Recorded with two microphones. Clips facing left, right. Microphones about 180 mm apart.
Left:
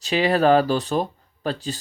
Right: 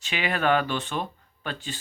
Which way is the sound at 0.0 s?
35° left (ahead or behind).